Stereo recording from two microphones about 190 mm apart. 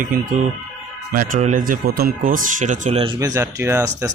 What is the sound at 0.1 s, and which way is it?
Speech, 50° right (ahead or behind).